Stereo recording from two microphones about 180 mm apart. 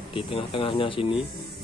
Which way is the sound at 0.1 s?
30° left (ahead or behind).